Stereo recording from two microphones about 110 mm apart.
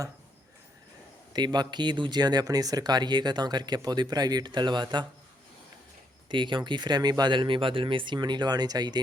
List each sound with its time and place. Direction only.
1.3 s speech: 40° right (ahead or behind)
6.2 s speech: 45° right (ahead or behind)